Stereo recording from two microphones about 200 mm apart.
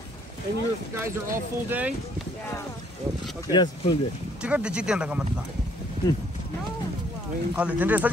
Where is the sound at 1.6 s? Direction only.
10° right (ahead or behind).